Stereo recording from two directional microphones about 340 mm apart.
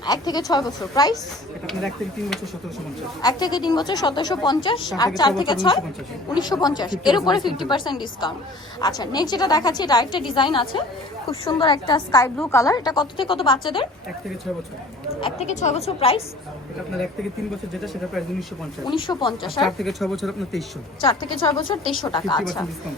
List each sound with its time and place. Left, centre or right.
0.0 s a woman's voice: centre
3.2 s a woman's voice: centre
15.2 s a woman's voice: centre
18.9 s a woman's voice: centre
19.6 s a woman's voice: centre
21.1 s a woman's voice: centre